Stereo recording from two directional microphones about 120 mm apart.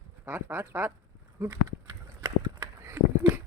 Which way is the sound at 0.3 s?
15° right (ahead or behind).